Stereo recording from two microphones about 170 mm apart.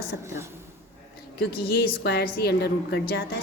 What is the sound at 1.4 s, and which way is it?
A woman's voice, 70° left (ahead or behind).